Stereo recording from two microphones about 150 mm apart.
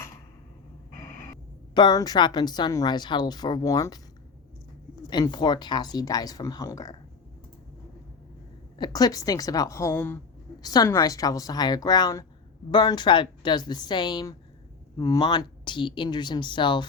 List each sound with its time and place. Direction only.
0.9 s a sound: 20° left (ahead or behind)
1.7 s a woman's voice: 25° left (ahead or behind)
5.0 s a woman's voice: 30° left (ahead or behind)
8.8 s a woman's voice: 25° left (ahead or behind)
10.6 s a woman's voice: 25° left (ahead or behind)